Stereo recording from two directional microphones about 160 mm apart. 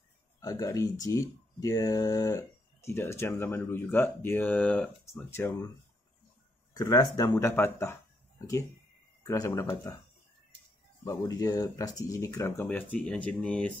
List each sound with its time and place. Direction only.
0.4 s speech: 20° left (ahead or behind)
6.7 s speech: 25° left (ahead or behind)
9.2 s speech: 20° left (ahead or behind)
11.1 s speech: 20° left (ahead or behind)
12.6 s speech: 10° left (ahead or behind)